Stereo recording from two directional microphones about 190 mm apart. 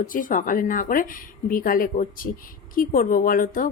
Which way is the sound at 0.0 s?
45° left (ahead or behind).